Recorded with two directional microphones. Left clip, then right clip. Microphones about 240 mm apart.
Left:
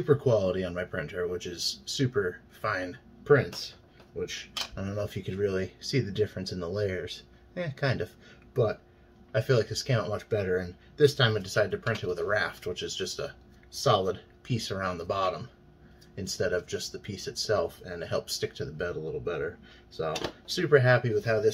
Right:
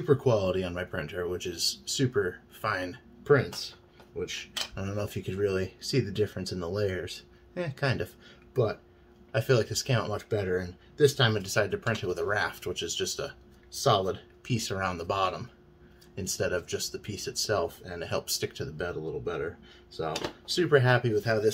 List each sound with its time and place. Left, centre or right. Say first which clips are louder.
0.0 s a man's voice: left 1 dB; right
9.3 s a man's voice: even; right
20.5 s a man's voice: left 1 dB; right